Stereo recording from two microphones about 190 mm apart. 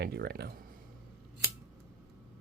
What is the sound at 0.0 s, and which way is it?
Speech, 60° right (ahead or behind).